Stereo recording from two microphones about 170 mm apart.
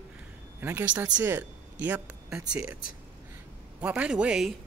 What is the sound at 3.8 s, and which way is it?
Speech, 10° right (ahead or behind).